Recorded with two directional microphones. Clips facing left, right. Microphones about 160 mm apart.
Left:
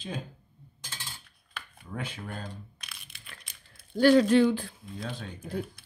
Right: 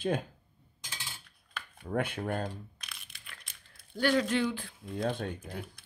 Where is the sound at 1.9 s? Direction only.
55° right (ahead or behind).